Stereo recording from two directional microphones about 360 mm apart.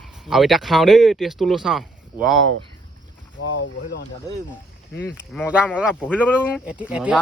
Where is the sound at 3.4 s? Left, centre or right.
Left.